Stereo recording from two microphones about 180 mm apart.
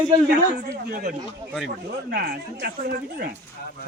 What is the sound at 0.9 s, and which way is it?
Speech, 50° right (ahead or behind).